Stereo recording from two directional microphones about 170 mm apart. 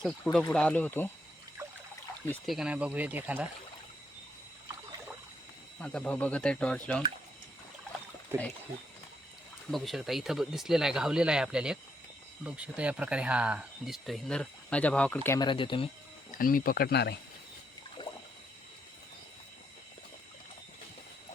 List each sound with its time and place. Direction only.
0.0 s speech: centre (ahead or behind)
2.5 s speech: 5° right (ahead or behind)
5.8 s speech: 5° left (ahead or behind)
9.7 s speech: centre (ahead or behind)
15.4 s speech: 30° left (ahead or behind)
16.4 s speech: 55° left (ahead or behind); by 17.2 s 75° left (ahead or behind)
18.0 s toilet flush: 25° left (ahead or behind)